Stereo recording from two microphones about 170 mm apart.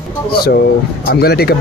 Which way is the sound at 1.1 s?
65° left (ahead or behind).